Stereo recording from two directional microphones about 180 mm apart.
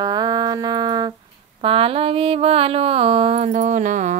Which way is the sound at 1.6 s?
30° right (ahead or behind).